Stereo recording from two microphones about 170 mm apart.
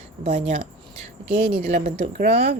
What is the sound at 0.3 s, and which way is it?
A woman's voice, 40° right (ahead or behind).